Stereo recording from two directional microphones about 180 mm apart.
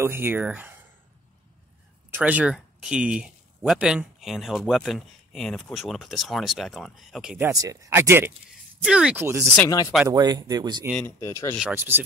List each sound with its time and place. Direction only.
0.0 s speech: 15° right (ahead or behind)
2.0 s speech: 10° right (ahead or behind)
7.4 s speech: 20° right (ahead or behind)
9.6 s speech: 20° left (ahead or behind)
10.0 s speech: 20° right (ahead or behind)
10.9 s speech: 5° left (ahead or behind)
11.1 s speech: 15° left (ahead or behind)
11.7 s speech: 10° right (ahead or behind)